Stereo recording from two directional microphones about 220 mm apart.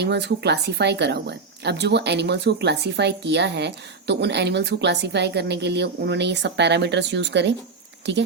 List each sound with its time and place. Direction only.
0.0 s speech: 50° right (ahead or behind)